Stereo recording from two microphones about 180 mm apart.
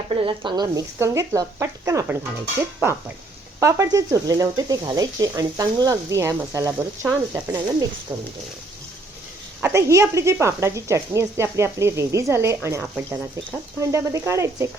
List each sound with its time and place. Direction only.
0.1 s speech: 30° right (ahead or behind)
3.6 s speech: 15° right (ahead or behind)
9.6 s speech: 15° right (ahead or behind)